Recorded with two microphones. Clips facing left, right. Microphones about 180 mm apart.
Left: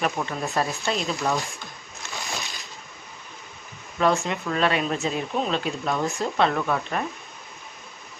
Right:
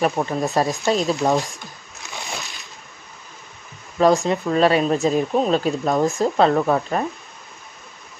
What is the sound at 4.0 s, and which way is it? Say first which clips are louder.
Speech: right 6 dB; 35° right (ahead or behind).